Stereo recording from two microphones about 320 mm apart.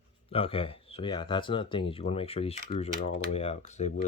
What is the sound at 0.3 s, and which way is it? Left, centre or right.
Speech, centre.